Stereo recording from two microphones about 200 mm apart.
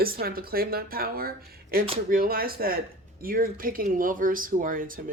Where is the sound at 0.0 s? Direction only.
50° right (ahead or behind).